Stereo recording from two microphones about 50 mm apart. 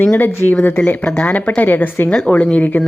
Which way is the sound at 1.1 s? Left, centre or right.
Left.